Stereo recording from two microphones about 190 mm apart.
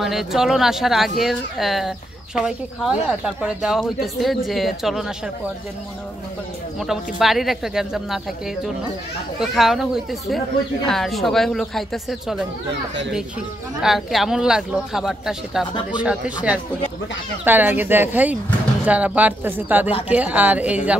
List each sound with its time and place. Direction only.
0.0 s speech: centre (ahead or behind)
6.8 s speech: centre (ahead or behind)
9.4 s speech: centre (ahead or behind)
13.8 s speech: centre (ahead or behind)